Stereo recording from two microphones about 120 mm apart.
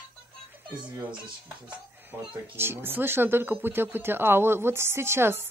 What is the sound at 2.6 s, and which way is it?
Speech, 20° right (ahead or behind).